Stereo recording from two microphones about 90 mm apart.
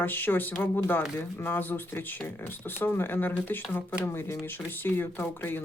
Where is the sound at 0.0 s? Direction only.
20° left (ahead or behind).